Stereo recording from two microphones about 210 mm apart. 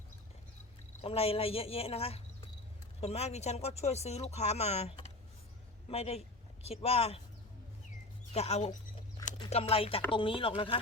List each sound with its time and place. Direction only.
1.0 s speech: 30° left (ahead or behind)
8.3 s speech: 30° left (ahead or behind)